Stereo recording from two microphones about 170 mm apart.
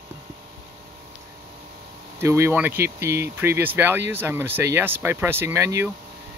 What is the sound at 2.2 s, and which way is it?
Speech, 15° right (ahead or behind).